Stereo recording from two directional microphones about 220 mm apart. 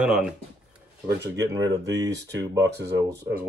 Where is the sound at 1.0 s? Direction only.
50° right (ahead or behind).